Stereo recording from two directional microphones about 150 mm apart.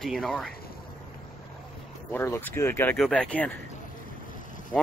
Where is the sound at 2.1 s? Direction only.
15° left (ahead or behind).